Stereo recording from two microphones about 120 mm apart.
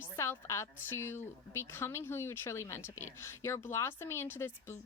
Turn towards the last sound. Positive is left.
turn(degrees=20)  # may be behind; listen again after turning